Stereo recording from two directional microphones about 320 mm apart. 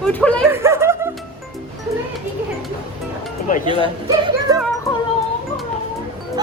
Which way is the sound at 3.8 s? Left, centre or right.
Centre.